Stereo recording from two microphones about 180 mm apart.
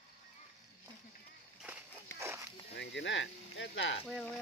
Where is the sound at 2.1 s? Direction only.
15° right (ahead or behind).